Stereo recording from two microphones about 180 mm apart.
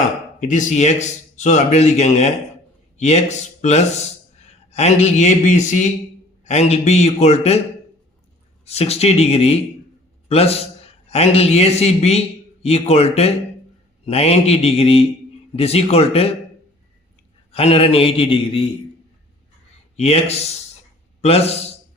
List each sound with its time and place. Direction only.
0.3 s speech: 45° left (ahead or behind)
8.6 s a man's voice: 35° left (ahead or behind)
17.5 s speech: 30° left (ahead or behind)
20.0 s a man's voice: 35° left (ahead or behind)